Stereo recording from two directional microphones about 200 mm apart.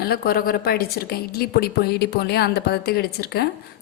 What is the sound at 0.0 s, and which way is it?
A woman's voice, 50° left (ahead or behind).